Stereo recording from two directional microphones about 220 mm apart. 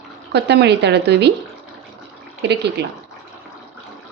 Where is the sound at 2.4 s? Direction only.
50° right (ahead or behind).